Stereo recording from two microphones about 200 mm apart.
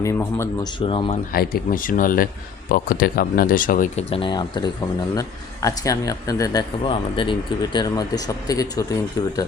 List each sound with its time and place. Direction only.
0.0 s speech: 15° left (ahead or behind)
0.8 s speech: 25° left (ahead or behind)
1.3 s speech: 45° left (ahead or behind)
4.1 s speech: 25° left (ahead or behind)